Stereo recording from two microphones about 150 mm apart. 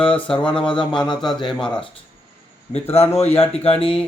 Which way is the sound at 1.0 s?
30° left (ahead or behind).